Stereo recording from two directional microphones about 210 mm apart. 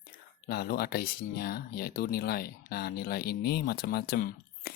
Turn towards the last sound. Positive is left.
turn(degrees=50)  # may be behind; listen again after turning